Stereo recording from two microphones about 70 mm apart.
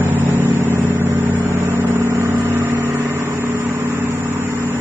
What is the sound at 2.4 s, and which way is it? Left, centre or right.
Vehicle, right.